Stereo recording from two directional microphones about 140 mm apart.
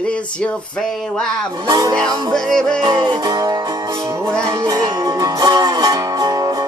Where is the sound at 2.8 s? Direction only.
35° right (ahead or behind).